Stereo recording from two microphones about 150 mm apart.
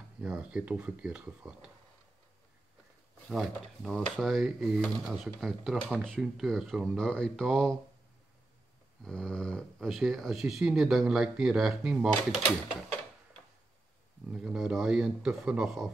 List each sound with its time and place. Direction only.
0.2 s speech: 5° right (ahead or behind)
3.3 s speech: centre (ahead or behind)
9.0 s speech: 5° left (ahead or behind)
14.3 s speech: 5° right (ahead or behind)